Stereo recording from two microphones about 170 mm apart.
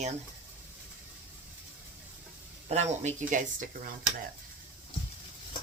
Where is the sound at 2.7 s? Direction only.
40° right (ahead or behind).